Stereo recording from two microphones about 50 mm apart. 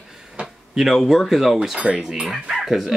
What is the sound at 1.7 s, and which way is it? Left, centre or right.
Speech, centre.